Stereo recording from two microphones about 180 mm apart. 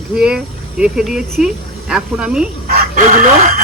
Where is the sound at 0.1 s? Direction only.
5° right (ahead or behind).